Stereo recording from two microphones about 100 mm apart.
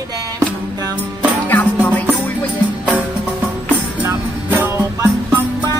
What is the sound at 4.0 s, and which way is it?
Music, 20° right (ahead or behind).